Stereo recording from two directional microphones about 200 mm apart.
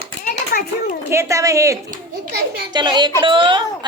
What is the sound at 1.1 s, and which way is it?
A woman's voice, 15° right (ahead or behind).